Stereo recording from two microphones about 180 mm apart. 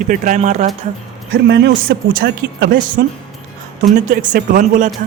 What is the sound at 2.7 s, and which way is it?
Speech, 50° right (ahead or behind).